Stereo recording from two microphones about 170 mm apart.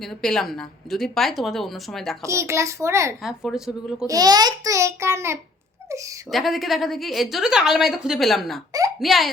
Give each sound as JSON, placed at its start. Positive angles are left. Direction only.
{"t": 0.0, "sound": "a woman's voice", "side_deg": 0}
{"t": 2.2, "sound": "a child's voice", "side_deg": -15}
{"t": 3.2, "sound": "a woman's voice", "side_deg": 0}
{"t": 4.0, "sound": "a child's voice", "side_deg": -20}
{"t": 6.3, "sound": "a woman's voice", "side_deg": 0}